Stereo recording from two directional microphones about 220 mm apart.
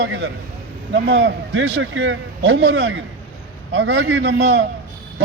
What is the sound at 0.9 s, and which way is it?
A man's voice, 60° right (ahead or behind).